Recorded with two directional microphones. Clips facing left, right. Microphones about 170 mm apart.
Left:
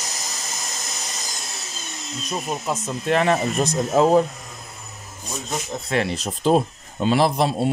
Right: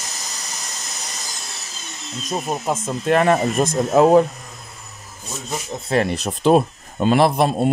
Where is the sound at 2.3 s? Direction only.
50° right (ahead or behind).